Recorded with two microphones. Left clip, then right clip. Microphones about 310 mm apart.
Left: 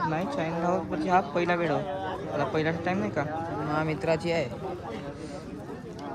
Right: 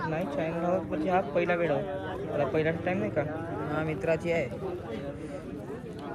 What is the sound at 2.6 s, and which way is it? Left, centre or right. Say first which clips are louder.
Speech: even; centre.